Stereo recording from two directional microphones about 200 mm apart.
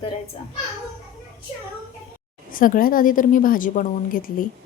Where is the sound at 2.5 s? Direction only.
45° left (ahead or behind).